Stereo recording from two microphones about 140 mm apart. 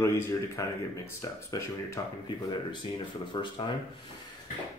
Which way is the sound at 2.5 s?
35° left (ahead or behind).